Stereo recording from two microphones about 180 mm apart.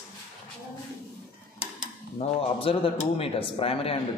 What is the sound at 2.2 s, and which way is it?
A man's voice, 35° left (ahead or behind).